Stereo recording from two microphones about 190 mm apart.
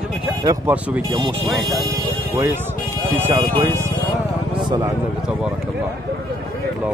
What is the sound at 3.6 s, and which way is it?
Speech, 15° right (ahead or behind).